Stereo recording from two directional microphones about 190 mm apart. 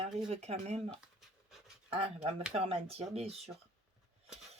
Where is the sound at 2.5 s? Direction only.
30° right (ahead or behind).